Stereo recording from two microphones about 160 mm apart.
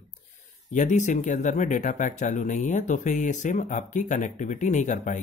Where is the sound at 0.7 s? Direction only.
50° left (ahead or behind).